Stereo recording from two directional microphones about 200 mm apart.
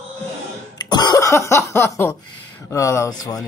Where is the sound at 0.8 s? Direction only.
20° left (ahead or behind).